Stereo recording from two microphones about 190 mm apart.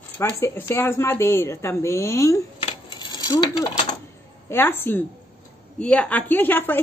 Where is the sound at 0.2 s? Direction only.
10° left (ahead or behind).